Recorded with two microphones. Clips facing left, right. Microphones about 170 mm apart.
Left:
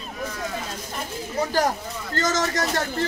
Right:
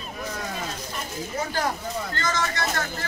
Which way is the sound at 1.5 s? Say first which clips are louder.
Left 4 dB; 40° left (ahead or behind).